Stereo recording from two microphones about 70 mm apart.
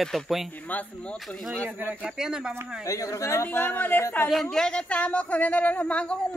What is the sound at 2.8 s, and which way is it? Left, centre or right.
Speech, left.